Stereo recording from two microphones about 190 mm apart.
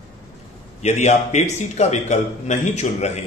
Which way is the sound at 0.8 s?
35° left (ahead or behind).